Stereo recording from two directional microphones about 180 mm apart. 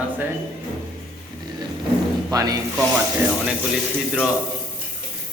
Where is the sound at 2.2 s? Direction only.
20° right (ahead or behind).